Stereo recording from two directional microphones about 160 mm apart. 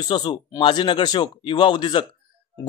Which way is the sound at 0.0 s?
25° left (ahead or behind).